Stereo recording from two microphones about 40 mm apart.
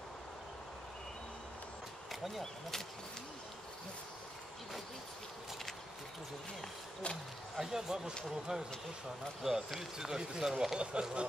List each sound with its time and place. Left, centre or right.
7.5 s speech: centre
10.8 s speech: right